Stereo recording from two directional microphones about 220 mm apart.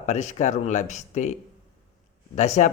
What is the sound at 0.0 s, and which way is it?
Speech, 30° left (ahead or behind).